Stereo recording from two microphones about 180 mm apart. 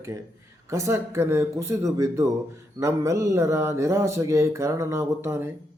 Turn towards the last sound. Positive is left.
turn(degrees=-15)  # may be behind; listen again after turning